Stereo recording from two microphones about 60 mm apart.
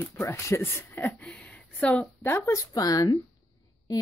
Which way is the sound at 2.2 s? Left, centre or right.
Left.